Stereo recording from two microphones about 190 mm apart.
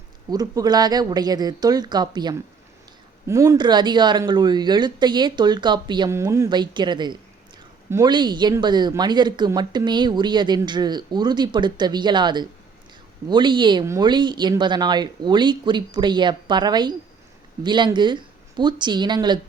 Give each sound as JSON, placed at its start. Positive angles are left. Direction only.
{"t": 0.3, "sound": "speech", "side_deg": -20}